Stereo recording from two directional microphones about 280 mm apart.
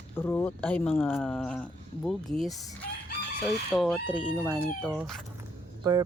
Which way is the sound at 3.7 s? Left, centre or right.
Centre.